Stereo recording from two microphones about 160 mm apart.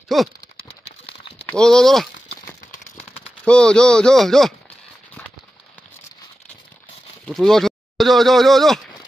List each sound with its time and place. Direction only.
0.1 s speech: centre (ahead or behind)
0.6 s a sound: 35° left (ahead or behind)
1.6 s speech: 5° left (ahead or behind)
3.4 s speech: 5° left (ahead or behind)
7.2 s speech: centre (ahead or behind)